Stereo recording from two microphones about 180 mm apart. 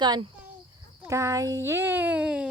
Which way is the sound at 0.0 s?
25° right (ahead or behind).